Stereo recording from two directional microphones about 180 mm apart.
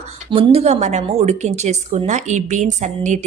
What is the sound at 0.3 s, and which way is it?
A woman's voice, 35° right (ahead or behind).